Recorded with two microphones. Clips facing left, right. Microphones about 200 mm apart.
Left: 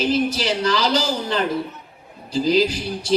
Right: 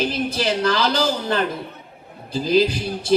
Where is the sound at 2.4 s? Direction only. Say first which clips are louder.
Right 1 dB; 55° right (ahead or behind).